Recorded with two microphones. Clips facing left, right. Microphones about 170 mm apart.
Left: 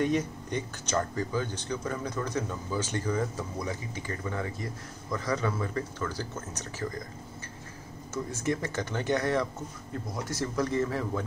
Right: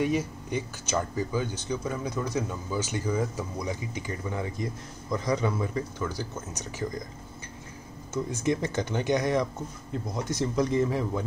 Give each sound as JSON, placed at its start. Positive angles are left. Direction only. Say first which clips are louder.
{"t": 0.0, "sound": "speech", "louder": "right 1 dB", "side_deg": -5}
{"t": 8.1, "sound": "speech", "louder": "right 3 dB", "side_deg": -20}